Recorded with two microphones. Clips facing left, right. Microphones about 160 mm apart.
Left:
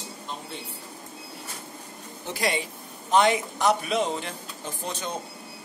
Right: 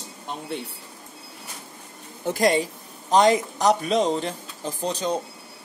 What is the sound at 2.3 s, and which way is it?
Speech, 40° right (ahead or behind).